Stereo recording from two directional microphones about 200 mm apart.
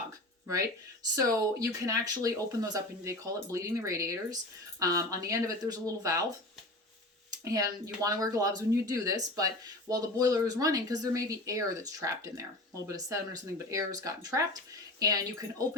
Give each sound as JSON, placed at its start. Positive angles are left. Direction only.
{"t": 0.4, "sound": "speech", "side_deg": -15}
{"t": 7.4, "sound": "speech", "side_deg": -15}